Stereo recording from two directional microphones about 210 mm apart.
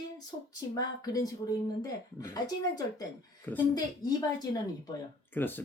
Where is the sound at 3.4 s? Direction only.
15° left (ahead or behind).